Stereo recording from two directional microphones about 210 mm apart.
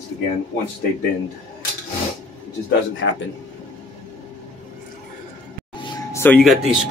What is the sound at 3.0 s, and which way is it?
Speech, 70° left (ahead or behind).